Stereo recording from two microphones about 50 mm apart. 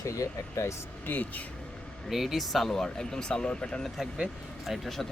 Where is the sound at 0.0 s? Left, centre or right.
Left.